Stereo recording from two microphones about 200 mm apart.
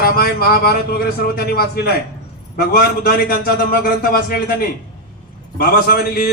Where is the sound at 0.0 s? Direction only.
50° left (ahead or behind).